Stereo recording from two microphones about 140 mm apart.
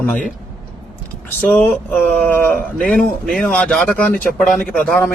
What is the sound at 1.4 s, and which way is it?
A man's voice, 10° left (ahead or behind).